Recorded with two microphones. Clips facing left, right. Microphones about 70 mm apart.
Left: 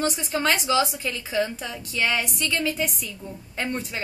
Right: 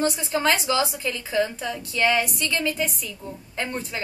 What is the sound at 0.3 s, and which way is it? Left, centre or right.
Music, centre.